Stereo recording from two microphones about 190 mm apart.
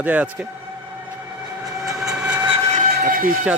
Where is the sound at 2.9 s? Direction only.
45° right (ahead or behind).